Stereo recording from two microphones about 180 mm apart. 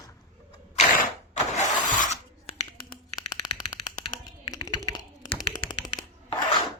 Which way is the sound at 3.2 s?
20° left (ahead or behind).